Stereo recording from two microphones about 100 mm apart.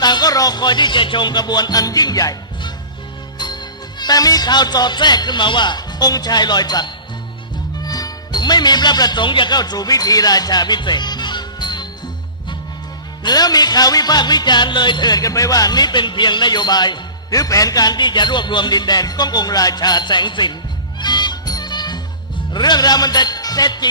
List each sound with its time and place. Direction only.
0.0 s music: 45° left (ahead or behind)
3.3 s speech: 45° left (ahead or behind)
13.2 s music: 40° left (ahead or behind)